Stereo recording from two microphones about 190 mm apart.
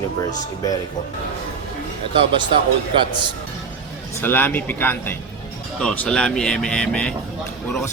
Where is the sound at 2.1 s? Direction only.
25° right (ahead or behind).